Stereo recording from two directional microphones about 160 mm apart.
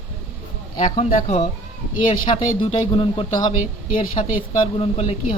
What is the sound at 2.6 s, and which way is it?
Speech, 35° left (ahead or behind).